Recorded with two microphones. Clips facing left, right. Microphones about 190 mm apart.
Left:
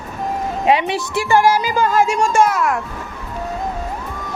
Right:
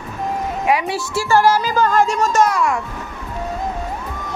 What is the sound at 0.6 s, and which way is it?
Speech, 25° left (ahead or behind).